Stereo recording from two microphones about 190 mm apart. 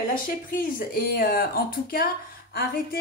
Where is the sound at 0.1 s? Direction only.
45° left (ahead or behind).